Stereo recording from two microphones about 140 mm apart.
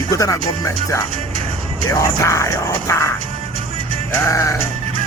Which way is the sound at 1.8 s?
20° left (ahead or behind).